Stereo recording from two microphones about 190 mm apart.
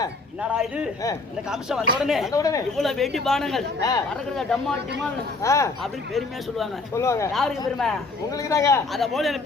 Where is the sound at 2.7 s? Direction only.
Centre (ahead or behind).